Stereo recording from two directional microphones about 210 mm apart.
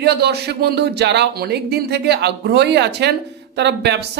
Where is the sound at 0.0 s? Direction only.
50° right (ahead or behind).